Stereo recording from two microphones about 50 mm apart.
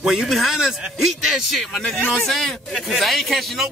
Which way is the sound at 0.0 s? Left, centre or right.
Centre.